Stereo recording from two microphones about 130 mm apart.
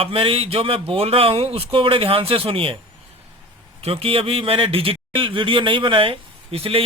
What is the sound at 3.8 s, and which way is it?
A man's voice, 45° right (ahead or behind).